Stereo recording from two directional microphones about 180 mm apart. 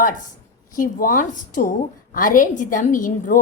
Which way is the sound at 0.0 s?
45° left (ahead or behind).